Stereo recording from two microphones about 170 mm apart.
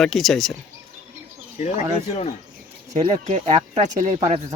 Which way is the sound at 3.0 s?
40° right (ahead or behind).